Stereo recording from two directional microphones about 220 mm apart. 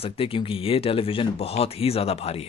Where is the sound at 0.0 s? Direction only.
25° left (ahead or behind).